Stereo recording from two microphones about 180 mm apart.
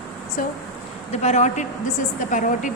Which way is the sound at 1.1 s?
40° left (ahead or behind).